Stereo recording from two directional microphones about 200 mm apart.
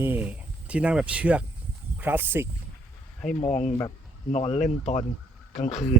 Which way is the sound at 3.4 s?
35° left (ahead or behind).